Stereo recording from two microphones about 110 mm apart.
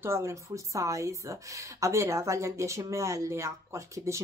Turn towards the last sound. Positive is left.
turn(degrees=-25)  # may be behind; listen again after turning